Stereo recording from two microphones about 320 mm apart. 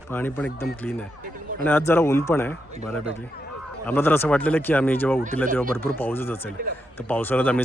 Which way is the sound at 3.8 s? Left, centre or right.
Centre.